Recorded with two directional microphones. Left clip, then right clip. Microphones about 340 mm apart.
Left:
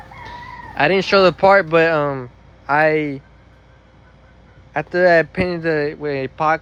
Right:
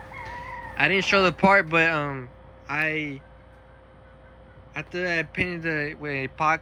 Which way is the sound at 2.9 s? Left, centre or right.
Left.